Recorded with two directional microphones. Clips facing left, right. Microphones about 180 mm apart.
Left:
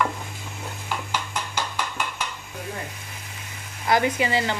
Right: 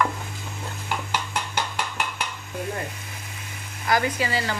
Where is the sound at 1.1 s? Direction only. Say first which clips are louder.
Right 1 dB; 60° right (ahead or behind).